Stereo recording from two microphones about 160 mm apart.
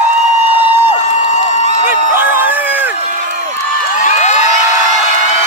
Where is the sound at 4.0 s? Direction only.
50° left (ahead or behind).